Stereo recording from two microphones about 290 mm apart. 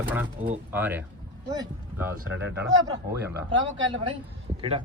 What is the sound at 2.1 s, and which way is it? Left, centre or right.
Speech, right.